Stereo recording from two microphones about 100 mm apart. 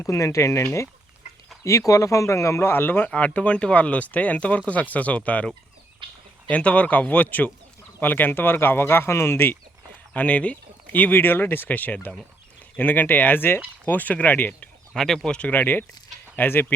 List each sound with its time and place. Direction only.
0.0 s speech: 30° left (ahead or behind)
1.9 s speech: 30° left (ahead or behind); by 5.5 s 15° left (ahead or behind)
6.0 s a sound: 55° right (ahead or behind)
6.5 s speech: 15° left (ahead or behind)
10.2 s speech: 15° left (ahead or behind)
14.9 s speech: 5° left (ahead or behind); by 16.7 s 20° left (ahead or behind)